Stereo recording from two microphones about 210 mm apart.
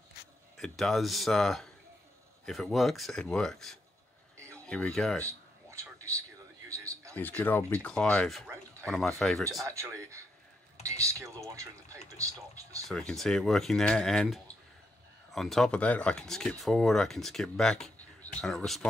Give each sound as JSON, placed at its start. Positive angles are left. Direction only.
{"t": 0.6, "sound": "speech", "side_deg": 0}
{"t": 4.4, "sound": "a sound", "side_deg": -15}
{"t": 4.6, "sound": "speech", "side_deg": 5}
{"t": 5.2, "sound": "a sound", "side_deg": -15}
{"t": 7.2, "sound": "speech", "side_deg": 10}
{"t": 9.7, "sound": "speech", "side_deg": -15}
{"t": 10.8, "sound": "a sound", "side_deg": -15}
{"t": 12.2, "sound": "speech", "side_deg": -15}
{"t": 12.8, "sound": "speech", "side_deg": 0}